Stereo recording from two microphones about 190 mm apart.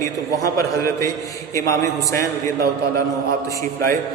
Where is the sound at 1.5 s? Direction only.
15° left (ahead or behind).